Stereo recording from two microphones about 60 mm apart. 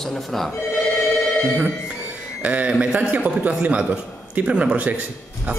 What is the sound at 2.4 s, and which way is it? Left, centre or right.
A man's voice, right.